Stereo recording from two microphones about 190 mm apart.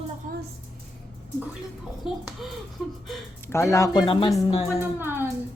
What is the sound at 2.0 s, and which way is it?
Speech, centre (ahead or behind).